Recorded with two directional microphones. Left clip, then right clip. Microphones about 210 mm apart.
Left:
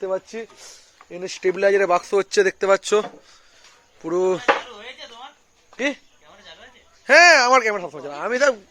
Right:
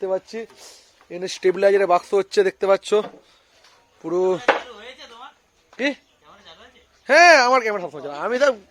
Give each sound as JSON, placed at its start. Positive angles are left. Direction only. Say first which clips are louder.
{"t": 0.0, "sound": "a man's voice", "louder": "right 1 dB", "side_deg": -15}
{"t": 0.5, "sound": "a sound", "louder": "left 1 dB", "side_deg": -15}
{"t": 1.2, "sound": "speech", "louder": "right 2 dB", "side_deg": -20}
{"t": 5.7, "sound": "speech", "louder": "even", "side_deg": -15}
{"t": 7.0, "sound": "speech", "louder": "even", "side_deg": 0}
{"t": 7.8, "sound": "a man's voice", "louder": "right 1 dB", "side_deg": -10}